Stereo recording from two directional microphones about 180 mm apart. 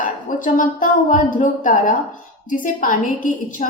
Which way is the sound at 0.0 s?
45° left (ahead or behind).